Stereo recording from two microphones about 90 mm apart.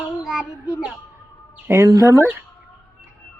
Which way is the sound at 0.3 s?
10° right (ahead or behind).